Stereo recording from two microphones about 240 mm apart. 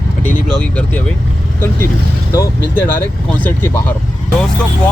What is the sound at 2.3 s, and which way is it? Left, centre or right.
Speech, centre.